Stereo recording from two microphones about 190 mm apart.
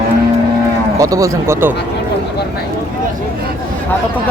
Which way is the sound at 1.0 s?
15° right (ahead or behind).